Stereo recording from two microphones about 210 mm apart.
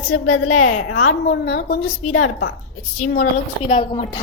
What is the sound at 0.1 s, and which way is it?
A woman's voice, 90° left.